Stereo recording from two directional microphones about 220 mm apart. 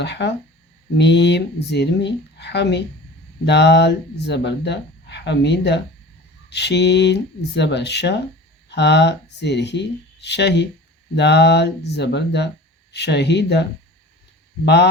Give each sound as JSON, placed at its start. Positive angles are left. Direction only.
{"t": 0.0, "sound": "speech", "side_deg": 50}